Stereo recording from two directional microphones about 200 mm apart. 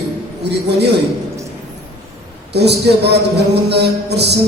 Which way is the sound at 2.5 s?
55° right (ahead or behind).